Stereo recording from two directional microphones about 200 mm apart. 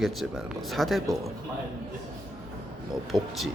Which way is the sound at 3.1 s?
20° right (ahead or behind).